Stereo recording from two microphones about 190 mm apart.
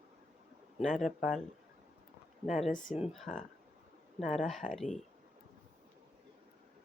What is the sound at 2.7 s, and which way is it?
Speech, 45° left (ahead or behind).